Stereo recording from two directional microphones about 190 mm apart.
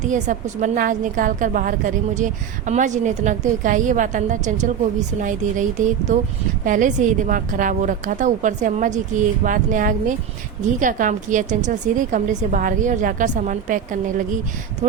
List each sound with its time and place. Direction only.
0.0 s a woman's voice: 40° right (ahead or behind)